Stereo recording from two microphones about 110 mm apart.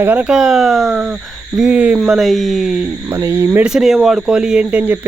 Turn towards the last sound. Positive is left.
turn(degrees=-10)  # may be behind; listen again after turning